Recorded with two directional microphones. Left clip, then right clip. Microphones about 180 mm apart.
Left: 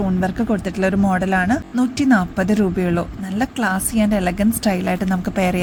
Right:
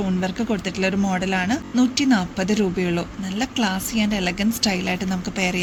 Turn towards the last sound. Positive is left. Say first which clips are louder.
# left 4 dB
turn(degrees=55)  # may be behind; listen again after turning